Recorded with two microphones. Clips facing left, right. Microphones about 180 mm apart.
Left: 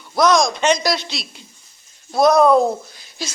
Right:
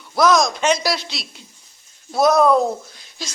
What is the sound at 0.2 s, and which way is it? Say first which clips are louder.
A woman's voice: left 1 dB; centre (ahead or behind).